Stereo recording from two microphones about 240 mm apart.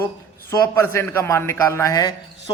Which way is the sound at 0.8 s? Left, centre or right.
Centre.